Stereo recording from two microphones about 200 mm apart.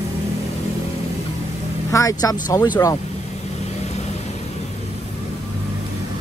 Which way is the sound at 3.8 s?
35° left (ahead or behind).